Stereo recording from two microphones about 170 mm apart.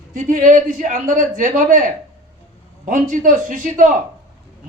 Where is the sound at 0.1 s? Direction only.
50° right (ahead or behind).